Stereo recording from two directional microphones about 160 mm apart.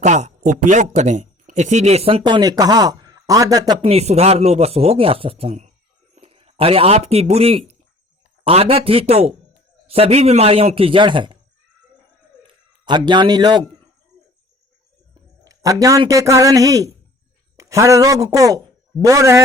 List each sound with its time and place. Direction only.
0.0 s speech: 45° right (ahead or behind); by 3.8 s 25° right (ahead or behind)
3.8 s speech: 40° right (ahead or behind)
12.8 s a man's voice: 30° right (ahead or behind)
15.4 s a man's voice: 20° right (ahead or behind)